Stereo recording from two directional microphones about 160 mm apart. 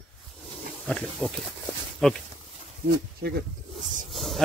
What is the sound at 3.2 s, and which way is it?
Speech, 75° right (ahead or behind).